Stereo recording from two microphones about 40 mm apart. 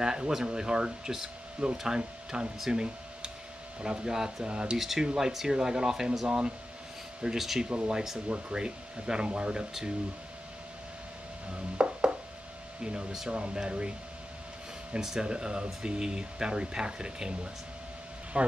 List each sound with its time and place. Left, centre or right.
0.0 s speech: centre
4.5 s speech: right
4.7 s speech: centre
7.2 s speech: centre
7.7 s speech: right
11.8 s a sound: right
13.3 s speech: right
15.0 s speech: centre
18.3 s speech: right